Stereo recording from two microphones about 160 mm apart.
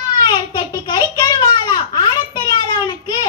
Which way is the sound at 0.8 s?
25° left (ahead or behind).